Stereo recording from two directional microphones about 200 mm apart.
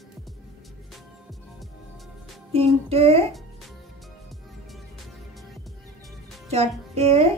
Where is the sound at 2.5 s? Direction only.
30° right (ahead or behind).